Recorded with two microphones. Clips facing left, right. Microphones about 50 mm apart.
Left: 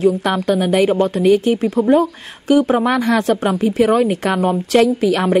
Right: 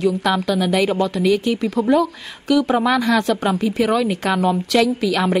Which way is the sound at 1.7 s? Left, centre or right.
Left.